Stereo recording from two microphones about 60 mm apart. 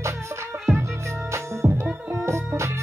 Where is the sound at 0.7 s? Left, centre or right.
Right.